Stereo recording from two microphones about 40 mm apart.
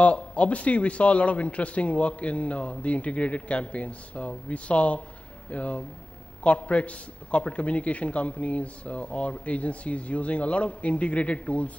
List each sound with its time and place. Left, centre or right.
0.0 s a man's voice: left